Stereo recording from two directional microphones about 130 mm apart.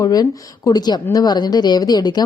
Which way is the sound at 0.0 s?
30° left (ahead or behind).